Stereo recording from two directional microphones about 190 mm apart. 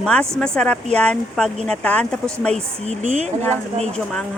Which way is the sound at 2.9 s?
35° right (ahead or behind).